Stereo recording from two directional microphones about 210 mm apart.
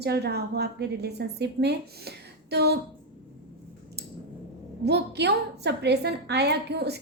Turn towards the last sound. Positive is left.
turn(degrees=-50)  # may be behind; listen again after turning